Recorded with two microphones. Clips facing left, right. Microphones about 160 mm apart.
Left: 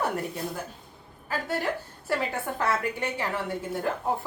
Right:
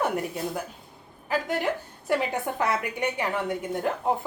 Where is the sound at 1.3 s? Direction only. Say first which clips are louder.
Right 3 dB; 15° right (ahead or behind).